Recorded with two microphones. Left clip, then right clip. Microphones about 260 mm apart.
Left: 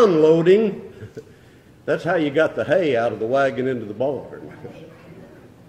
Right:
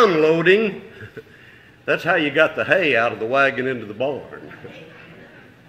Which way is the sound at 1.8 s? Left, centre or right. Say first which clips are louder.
Right 2 dB; centre.